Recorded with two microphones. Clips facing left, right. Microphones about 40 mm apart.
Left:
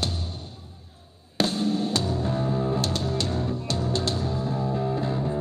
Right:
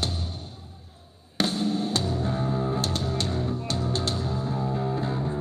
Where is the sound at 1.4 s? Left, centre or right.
Right.